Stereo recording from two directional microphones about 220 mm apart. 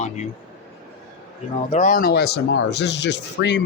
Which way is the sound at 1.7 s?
35° left (ahead or behind).